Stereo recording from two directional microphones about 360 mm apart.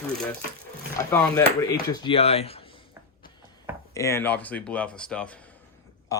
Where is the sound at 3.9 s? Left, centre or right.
Centre.